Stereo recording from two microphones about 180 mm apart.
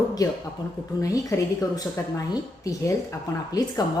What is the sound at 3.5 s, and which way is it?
Speech, 20° left (ahead or behind).